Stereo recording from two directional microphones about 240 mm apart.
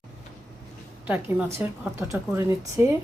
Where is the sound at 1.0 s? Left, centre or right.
Centre.